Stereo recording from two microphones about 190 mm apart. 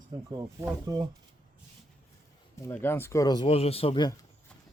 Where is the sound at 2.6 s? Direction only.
10° left (ahead or behind); by 4.1 s 25° left (ahead or behind).